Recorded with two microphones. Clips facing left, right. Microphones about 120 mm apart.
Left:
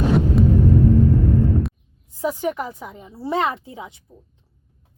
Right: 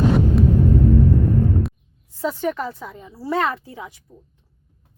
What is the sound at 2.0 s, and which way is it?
A woman's voice, 15° left (ahead or behind).